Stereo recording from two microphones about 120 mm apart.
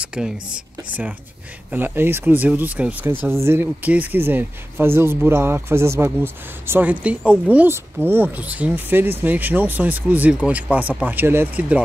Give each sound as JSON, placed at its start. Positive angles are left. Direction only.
{"t": 0.0, "sound": "whispering", "side_deg": -5}
{"t": 0.8, "sound": "speech", "side_deg": -15}